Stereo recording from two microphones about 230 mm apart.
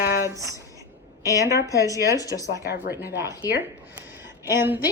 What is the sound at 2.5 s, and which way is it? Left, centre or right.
Speech, left.